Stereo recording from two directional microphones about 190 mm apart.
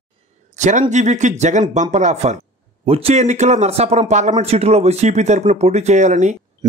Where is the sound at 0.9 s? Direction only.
40° right (ahead or behind).